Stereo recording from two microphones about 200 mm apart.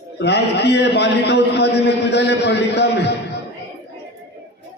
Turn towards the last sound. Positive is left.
turn(degrees=55)  # may be behind; listen again after turning